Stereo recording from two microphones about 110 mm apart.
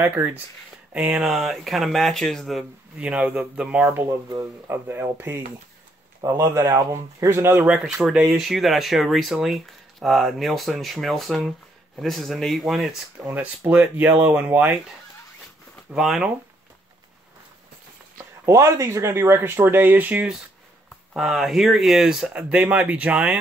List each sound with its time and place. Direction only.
0.0 s speech: 15° right (ahead or behind); by 3.1 s centre (ahead or behind)
3.1 s speech: 10° right (ahead or behind)
13.2 s speech: 15° right (ahead or behind)
15.9 s speech: 5° right (ahead or behind)
18.1 s speech: 25° right (ahead or behind)
21.1 s speech: 5° right (ahead or behind)